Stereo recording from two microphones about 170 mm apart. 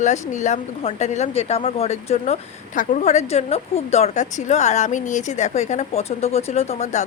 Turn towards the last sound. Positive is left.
turn(degrees=40)  # may be behind; listen again after turning